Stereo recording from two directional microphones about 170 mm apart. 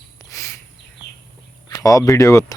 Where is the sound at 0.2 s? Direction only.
20° left (ahead or behind).